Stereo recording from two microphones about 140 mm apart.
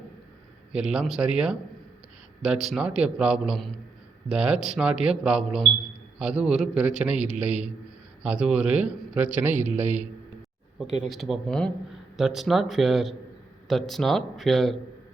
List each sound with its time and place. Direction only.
0.7 s a man's voice: 5° right (ahead or behind)
11.0 s a man's voice: centre (ahead or behind)